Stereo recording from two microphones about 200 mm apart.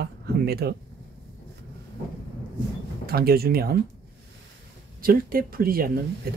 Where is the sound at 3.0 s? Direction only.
50° right (ahead or behind).